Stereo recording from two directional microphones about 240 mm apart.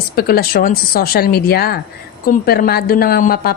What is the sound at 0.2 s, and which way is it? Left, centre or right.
Speech, left.